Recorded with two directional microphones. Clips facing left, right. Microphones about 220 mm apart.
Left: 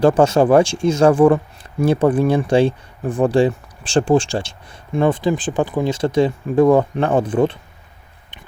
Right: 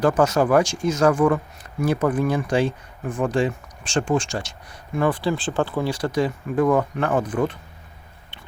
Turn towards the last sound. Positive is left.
turn(degrees=30)  # may be behind; listen again after turning